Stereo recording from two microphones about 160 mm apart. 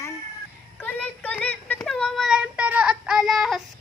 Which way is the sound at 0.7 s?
10° left (ahead or behind).